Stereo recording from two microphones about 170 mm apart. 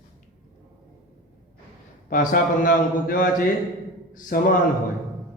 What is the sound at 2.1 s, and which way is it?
A man's voice, 55° left (ahead or behind).